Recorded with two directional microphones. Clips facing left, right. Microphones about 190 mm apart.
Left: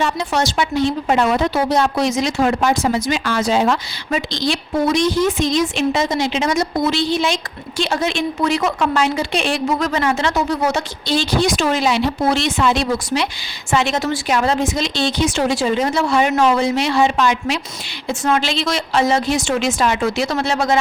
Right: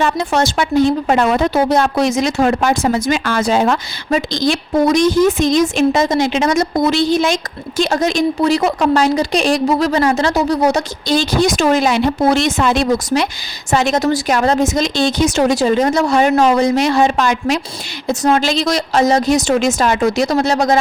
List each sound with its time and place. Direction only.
0.0 s a woman's voice: 50° right (ahead or behind)